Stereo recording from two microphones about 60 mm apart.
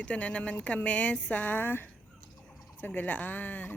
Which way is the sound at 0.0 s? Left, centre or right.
Centre.